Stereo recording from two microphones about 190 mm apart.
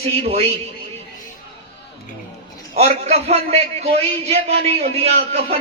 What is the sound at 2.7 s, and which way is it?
A man's voice, 35° right (ahead or behind).